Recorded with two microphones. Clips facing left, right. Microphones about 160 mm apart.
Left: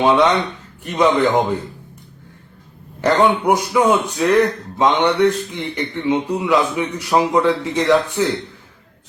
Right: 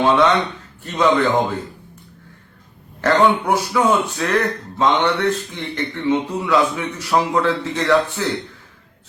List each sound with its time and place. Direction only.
0.0 s a man's voice: 15° left (ahead or behind)
3.0 s a man's voice: 15° left (ahead or behind)